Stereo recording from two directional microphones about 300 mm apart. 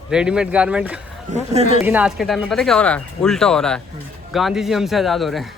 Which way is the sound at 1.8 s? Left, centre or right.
Centre.